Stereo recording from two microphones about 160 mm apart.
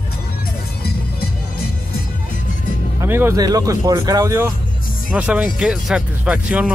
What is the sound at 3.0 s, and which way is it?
Speech, 15° right (ahead or behind).